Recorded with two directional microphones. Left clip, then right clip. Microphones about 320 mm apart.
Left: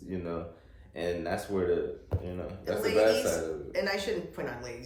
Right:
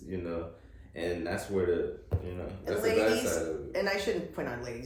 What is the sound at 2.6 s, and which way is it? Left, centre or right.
A woman's voice, centre.